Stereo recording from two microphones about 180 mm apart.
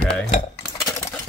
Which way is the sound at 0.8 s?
15° left (ahead or behind).